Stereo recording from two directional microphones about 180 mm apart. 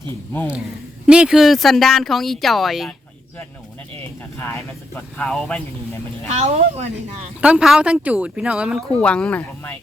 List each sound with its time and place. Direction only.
1.0 s speech: 5° right (ahead or behind)
4.9 s speech: 5° left (ahead or behind)
6.2 s speech: 35° right (ahead or behind)
7.4 s speech: 5° right (ahead or behind)
9.0 s speech: 5° left (ahead or behind)